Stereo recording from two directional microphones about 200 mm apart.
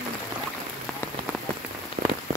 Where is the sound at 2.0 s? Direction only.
50° right (ahead or behind).